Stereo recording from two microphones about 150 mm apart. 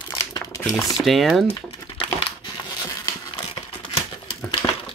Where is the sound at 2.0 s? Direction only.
35° left (ahead or behind).